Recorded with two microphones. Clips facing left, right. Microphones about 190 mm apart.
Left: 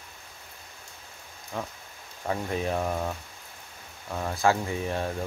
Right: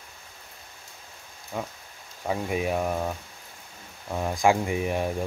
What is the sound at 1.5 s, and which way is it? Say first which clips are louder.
Speech: right 2 dB; 10° right (ahead or behind).